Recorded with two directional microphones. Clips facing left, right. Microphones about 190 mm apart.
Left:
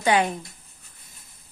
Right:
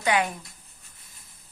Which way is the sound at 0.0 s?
30° left (ahead or behind).